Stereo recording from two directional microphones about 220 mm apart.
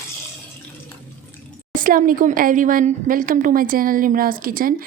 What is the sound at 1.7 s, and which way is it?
A woman's voice, 40° right (ahead or behind).